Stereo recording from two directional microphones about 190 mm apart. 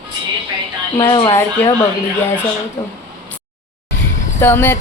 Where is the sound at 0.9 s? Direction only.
25° left (ahead or behind).